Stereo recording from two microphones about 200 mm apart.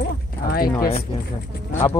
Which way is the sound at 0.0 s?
50° left (ahead or behind).